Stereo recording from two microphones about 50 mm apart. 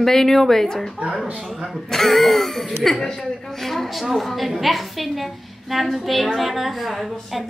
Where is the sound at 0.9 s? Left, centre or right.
Right.